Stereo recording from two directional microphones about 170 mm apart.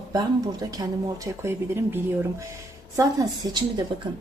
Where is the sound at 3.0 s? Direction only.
25° right (ahead or behind).